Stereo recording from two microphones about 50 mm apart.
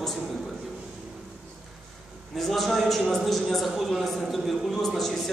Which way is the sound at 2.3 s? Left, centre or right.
Centre.